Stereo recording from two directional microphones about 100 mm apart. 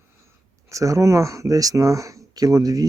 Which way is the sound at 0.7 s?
30° right (ahead or behind).